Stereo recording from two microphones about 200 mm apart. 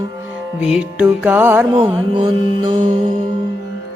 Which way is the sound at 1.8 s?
25° right (ahead or behind).